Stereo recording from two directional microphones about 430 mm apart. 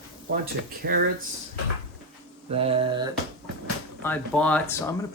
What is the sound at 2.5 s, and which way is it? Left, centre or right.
Mantra, centre.